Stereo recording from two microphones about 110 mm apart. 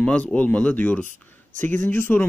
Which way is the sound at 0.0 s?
10° left (ahead or behind).